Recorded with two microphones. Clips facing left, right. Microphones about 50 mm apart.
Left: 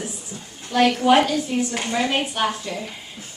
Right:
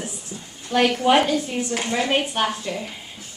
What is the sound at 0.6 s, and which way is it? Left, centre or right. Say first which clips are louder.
A woman's voice: left 1 dB; right.